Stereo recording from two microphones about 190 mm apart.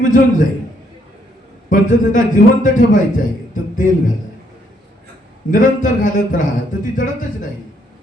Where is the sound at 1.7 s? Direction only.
45° left (ahead or behind).